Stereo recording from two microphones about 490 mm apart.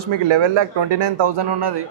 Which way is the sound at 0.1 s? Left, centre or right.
Right.